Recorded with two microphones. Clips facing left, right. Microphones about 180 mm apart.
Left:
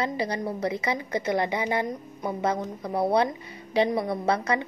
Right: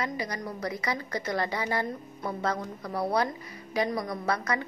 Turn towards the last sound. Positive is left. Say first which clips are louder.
# left 5 dB
turn(degrees=25)  # may be behind; listen again after turning